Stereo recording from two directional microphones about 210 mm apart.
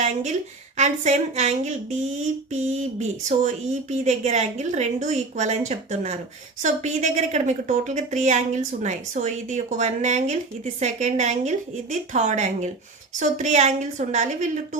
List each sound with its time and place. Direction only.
0.0 s a woman's voice: 35° right (ahead or behind)